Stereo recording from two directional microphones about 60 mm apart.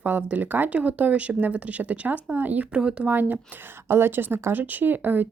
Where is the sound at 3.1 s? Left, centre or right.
Right.